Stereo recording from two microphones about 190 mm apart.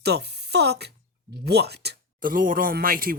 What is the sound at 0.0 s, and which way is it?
Speech, 60° right (ahead or behind).